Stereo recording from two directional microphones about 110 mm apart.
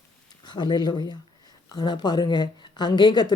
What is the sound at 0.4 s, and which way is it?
Speech, 40° left (ahead or behind).